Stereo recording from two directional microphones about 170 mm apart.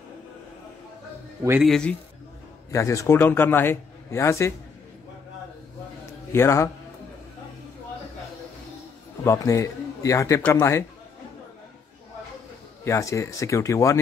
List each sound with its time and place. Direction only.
1.6 s speech: 5° left (ahead or behind)
2.7 s a man's voice: 20° left (ahead or behind)
6.0 s a sound: 15° left (ahead or behind)
9.2 s a man's voice: 15° left (ahead or behind)
12.8 s a man's voice: 15° left (ahead or behind)